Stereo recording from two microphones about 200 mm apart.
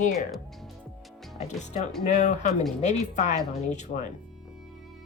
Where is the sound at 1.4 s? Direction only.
35° left (ahead or behind).